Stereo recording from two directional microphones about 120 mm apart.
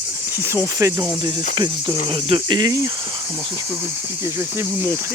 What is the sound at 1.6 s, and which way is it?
Cricket, 40° right (ahead or behind).